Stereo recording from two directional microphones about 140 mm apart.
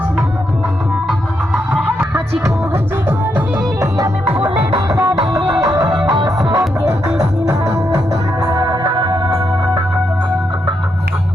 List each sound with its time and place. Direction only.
1.5 s music: 10° right (ahead or behind); by 6.7 s 30° right (ahead or behind)
7.7 s music: 20° right (ahead or behind)